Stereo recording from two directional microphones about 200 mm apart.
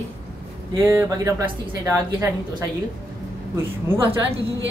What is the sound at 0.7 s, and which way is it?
A woman's voice, 15° right (ahead or behind).